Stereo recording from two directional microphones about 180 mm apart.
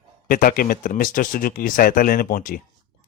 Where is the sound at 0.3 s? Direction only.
55° left (ahead or behind).